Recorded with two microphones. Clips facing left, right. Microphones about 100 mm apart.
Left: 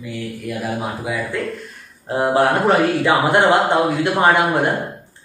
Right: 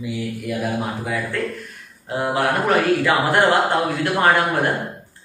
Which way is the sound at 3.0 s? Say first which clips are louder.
Left 2 dB; 20° left (ahead or behind).